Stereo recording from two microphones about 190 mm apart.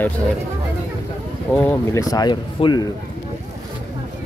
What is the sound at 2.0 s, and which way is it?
Speech, 20° left (ahead or behind).